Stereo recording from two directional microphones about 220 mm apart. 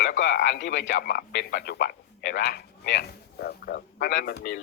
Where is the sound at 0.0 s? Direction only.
55° left (ahead or behind).